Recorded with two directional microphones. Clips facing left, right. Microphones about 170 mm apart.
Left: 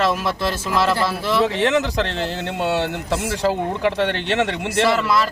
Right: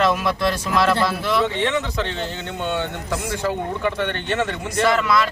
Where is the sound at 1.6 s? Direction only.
80° left.